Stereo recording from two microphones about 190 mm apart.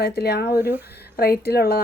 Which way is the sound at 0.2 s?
60° left (ahead or behind).